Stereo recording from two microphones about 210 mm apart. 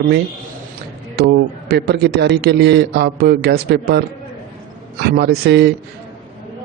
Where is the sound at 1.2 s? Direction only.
50° right (ahead or behind).